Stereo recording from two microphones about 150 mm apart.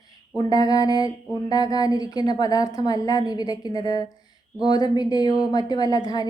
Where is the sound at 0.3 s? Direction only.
25° left (ahead or behind).